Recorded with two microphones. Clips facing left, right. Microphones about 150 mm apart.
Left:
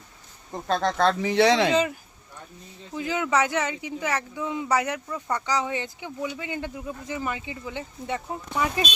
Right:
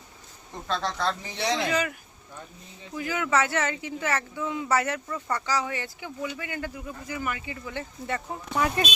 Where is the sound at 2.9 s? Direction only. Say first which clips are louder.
Left 1 dB; 20° left (ahead or behind).